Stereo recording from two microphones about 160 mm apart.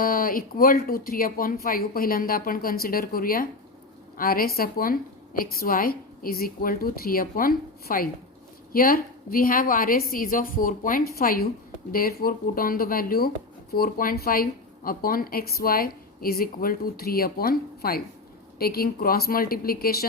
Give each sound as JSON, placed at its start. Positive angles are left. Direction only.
{"t": 0.0, "sound": "a woman's voice", "side_deg": 65}